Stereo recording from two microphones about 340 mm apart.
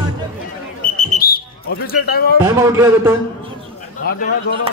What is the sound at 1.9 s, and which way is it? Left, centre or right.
Speech, left.